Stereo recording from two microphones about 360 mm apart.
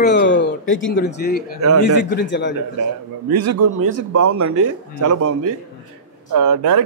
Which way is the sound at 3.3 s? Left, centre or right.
Right.